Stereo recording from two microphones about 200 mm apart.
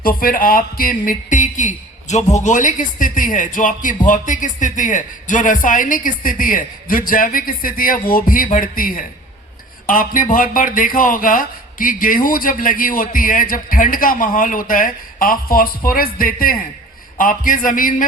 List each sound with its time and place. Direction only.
0.0 s speech: 45° left (ahead or behind)